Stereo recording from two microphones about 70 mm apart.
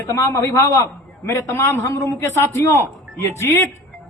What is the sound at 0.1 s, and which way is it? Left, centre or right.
Speech, left.